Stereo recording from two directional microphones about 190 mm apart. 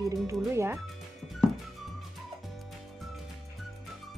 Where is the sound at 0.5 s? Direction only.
15° right (ahead or behind).